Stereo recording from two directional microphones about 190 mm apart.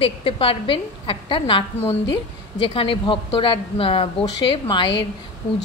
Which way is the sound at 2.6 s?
30° left (ahead or behind).